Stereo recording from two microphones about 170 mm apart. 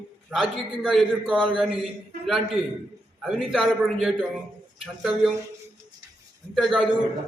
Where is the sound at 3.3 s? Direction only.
Centre (ahead or behind).